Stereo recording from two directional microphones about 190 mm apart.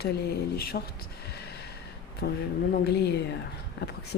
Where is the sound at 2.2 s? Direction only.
55° left (ahead or behind).